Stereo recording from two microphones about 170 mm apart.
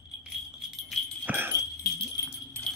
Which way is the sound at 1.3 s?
10° right (ahead or behind).